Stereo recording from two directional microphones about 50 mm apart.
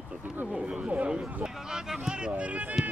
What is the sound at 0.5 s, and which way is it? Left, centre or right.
Speech, right.